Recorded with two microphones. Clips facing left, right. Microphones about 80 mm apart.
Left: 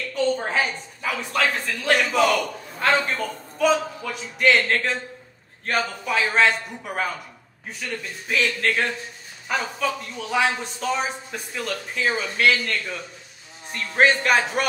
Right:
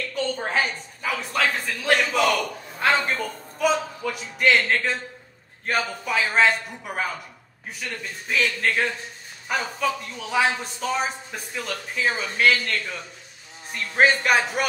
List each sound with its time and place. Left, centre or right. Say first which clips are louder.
0.1 s speech: left 4 dB; centre